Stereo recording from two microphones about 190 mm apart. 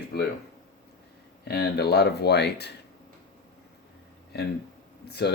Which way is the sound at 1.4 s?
60° left (ahead or behind).